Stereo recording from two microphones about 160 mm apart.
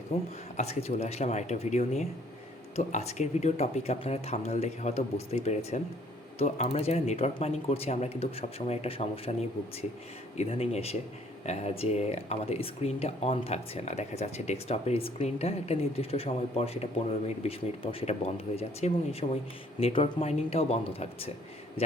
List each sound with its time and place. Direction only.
0.1 s speech: 40° left (ahead or behind)
10.3 s speech: 40° left (ahead or behind)